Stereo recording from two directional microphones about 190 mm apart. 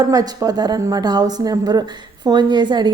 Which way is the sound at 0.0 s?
20° right (ahead or behind).